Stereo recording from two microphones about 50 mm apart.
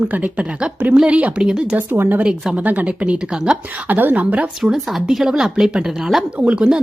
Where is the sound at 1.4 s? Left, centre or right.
Centre.